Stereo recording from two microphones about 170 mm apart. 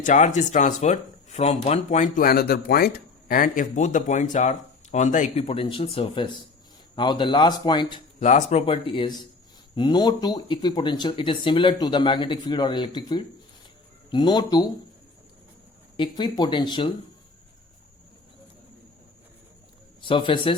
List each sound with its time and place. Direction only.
0.0 s speech: 45° left (ahead or behind)
2.2 s speech: 65° left (ahead or behind); by 5.5 s 45° left (ahead or behind)
5.5 s speech: 30° left (ahead or behind)
8.2 s speech: 45° left (ahead or behind); by 14.7 s 25° left (ahead or behind)
16.0 s speech: 25° left (ahead or behind)
20.0 s speech: 30° left (ahead or behind)